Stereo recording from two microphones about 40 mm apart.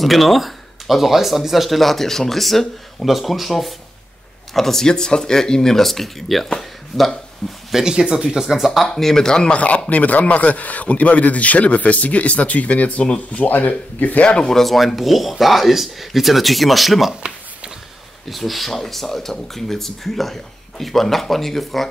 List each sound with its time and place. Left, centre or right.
0.0 s speech: centre
7.7 s speech: centre
8.9 s speech: centre
9.5 s speech: left
13.0 s speech: left
13.4 s speech: left
14.3 s speech: centre
14.6 s speech: centre
18.3 s speech: centre